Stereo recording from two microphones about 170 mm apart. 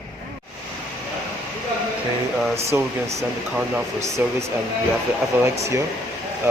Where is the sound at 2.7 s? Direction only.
10° right (ahead or behind).